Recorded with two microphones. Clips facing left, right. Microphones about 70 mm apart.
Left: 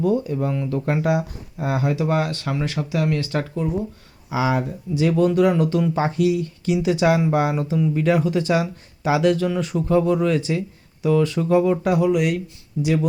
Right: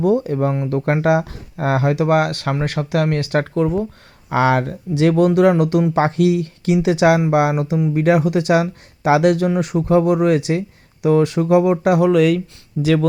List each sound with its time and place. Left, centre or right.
0.0 s speech: right
0.3 s speech: right
1.0 s speech: right
7.2 s speech: right
9.7 s speech: right
11.9 s speech: right
12.8 s speech: right